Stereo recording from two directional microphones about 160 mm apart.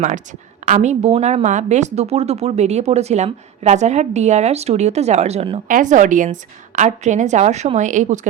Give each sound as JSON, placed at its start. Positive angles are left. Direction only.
{"t": 0.0, "sound": "a woman's voice", "side_deg": -50}
{"t": 5.6, "sound": "a woman's voice", "side_deg": -55}